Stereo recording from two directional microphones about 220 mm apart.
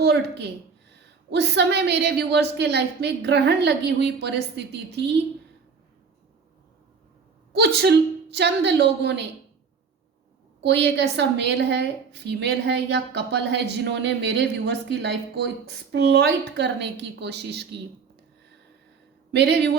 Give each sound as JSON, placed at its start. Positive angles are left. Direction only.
{"t": 0.0, "sound": "a woman's voice", "side_deg": -50}
{"t": 7.5, "sound": "a woman's voice", "side_deg": -50}
{"t": 10.6, "sound": "a woman's voice", "side_deg": -50}
{"t": 19.3, "sound": "a woman's voice", "side_deg": -50}